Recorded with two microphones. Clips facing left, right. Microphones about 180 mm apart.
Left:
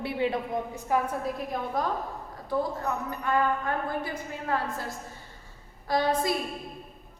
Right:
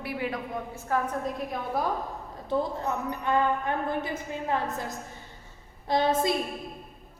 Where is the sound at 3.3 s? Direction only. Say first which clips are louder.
Right 1 dB; 20° right (ahead or behind).